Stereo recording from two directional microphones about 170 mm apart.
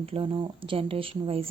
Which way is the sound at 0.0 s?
30° right (ahead or behind).